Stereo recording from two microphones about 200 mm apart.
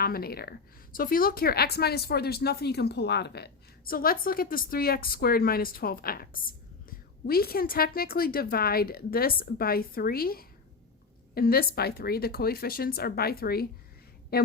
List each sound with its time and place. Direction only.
0.0 s a woman's voice: 50° left (ahead or behind)